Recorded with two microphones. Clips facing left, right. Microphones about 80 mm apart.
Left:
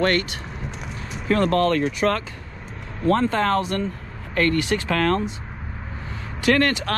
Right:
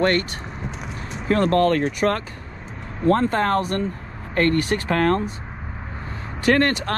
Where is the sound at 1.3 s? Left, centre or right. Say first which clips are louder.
Right 1 dB; right.